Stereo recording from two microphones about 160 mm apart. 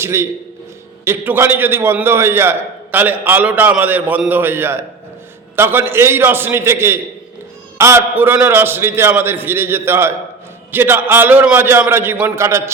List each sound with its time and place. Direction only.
0.0 s a man's voice: 15° right (ahead or behind)